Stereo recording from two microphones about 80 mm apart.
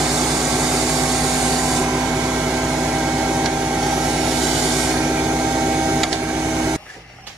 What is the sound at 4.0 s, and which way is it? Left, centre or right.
Vehicle, centre.